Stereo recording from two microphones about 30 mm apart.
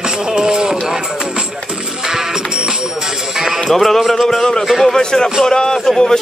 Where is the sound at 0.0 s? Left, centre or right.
Right.